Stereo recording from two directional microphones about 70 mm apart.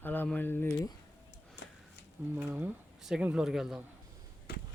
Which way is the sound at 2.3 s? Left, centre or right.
Right.